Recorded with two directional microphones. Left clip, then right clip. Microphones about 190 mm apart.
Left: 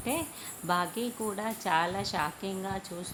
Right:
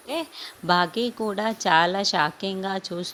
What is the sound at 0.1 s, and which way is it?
A woman's voice, 35° right (ahead or behind).